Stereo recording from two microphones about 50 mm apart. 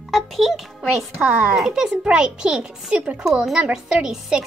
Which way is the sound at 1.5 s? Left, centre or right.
Centre.